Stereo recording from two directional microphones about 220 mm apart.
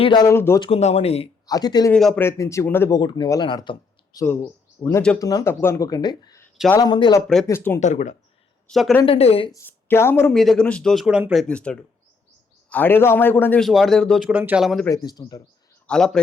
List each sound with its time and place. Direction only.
0.0 s speech: 20° left (ahead or behind)
0.6 s speech: 30° left (ahead or behind)
1.5 s speech: 15° left (ahead or behind)
1.9 s speech: 5° left (ahead or behind)
7.8 s speech: 35° left (ahead or behind)
8.7 s speech: centre (ahead or behind)
9.0 s speech: 25° left (ahead or behind)
9.6 s speech: 10° left (ahead or behind)
14.8 s speech: 15° left (ahead or behind)
15.9 s speech: 5° left (ahead or behind)